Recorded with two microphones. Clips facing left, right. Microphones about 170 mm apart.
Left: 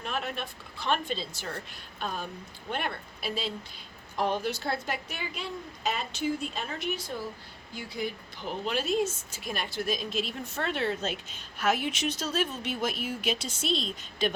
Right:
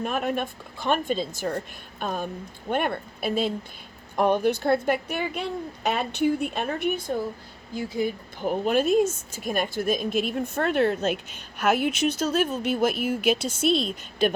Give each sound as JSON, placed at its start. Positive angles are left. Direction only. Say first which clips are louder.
{"t": 0.0, "sound": "a woman's voice", "louder": "right 8 dB", "side_deg": -50}